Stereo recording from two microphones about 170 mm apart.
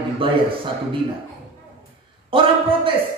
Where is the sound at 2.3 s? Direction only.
30° right (ahead or behind).